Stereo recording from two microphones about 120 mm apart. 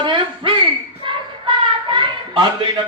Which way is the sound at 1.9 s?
40° right (ahead or behind).